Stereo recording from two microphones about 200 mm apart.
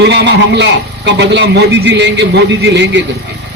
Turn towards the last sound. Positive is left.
turn(degrees=-60)  # may be behind; listen again after turning